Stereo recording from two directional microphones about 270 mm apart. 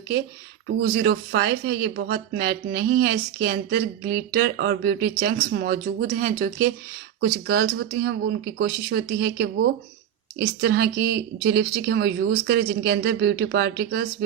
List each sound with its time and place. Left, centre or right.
0.7 s speech: right